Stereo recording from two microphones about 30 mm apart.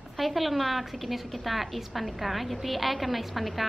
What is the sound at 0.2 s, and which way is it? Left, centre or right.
A woman's voice, centre.